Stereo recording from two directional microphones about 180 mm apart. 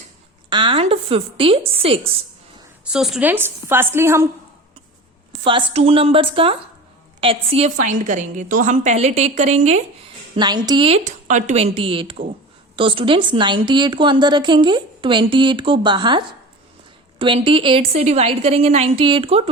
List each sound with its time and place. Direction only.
0.5 s a woman's voice: 30° right (ahead or behind)
2.8 s a woman's voice: centre (ahead or behind)
5.3 s a woman's voice: 30° right (ahead or behind)
10.3 s a woman's voice: 25° right (ahead or behind)